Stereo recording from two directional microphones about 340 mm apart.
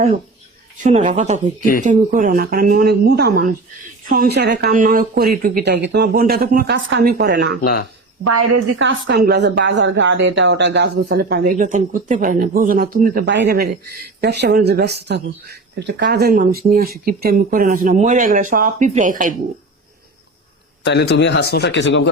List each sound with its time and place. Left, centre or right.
0.8 s a woman's voice: centre
7.6 s speech: left
8.2 s a woman's voice: right
20.8 s speech: left